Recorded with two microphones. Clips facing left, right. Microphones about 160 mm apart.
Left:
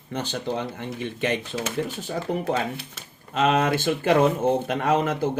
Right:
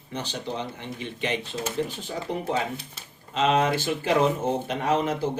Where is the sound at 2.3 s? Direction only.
5° left (ahead or behind).